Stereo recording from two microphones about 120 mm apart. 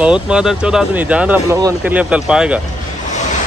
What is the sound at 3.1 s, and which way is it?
Waves, 90° left.